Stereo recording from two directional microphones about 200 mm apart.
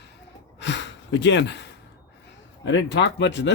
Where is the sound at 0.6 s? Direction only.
60° left (ahead or behind).